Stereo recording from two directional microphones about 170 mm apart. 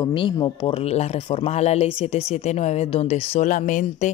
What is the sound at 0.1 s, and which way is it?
Speech, 30° left (ahead or behind).